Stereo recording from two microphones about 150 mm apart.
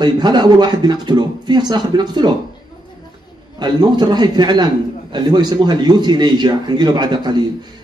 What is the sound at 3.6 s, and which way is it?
Speech, 30° right (ahead or behind).